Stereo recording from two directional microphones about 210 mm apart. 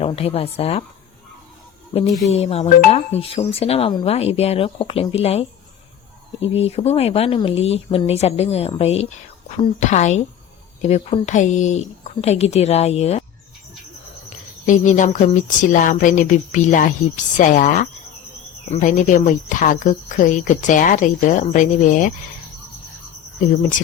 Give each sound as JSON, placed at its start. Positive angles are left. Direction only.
{"t": 0.0, "sound": "speech", "side_deg": 25}
{"t": 1.9, "sound": "speech", "side_deg": 30}
{"t": 14.3, "sound": "speech", "side_deg": 35}